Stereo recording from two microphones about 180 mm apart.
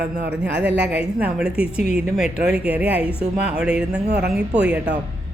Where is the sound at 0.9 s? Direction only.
5° right (ahead or behind).